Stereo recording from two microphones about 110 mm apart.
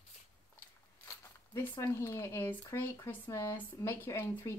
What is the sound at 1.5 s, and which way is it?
Speech, 25° left (ahead or behind).